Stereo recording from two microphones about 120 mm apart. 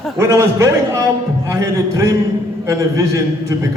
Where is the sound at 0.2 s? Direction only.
25° right (ahead or behind).